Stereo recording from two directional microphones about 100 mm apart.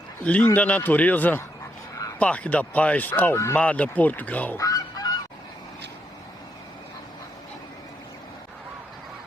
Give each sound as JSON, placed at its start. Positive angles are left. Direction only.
{"t": 0.3, "sound": "speech", "side_deg": 15}
{"t": 3.3, "sound": "speech", "side_deg": 30}
{"t": 3.6, "sound": "speech", "side_deg": 15}
{"t": 4.5, "sound": "goose", "side_deg": 35}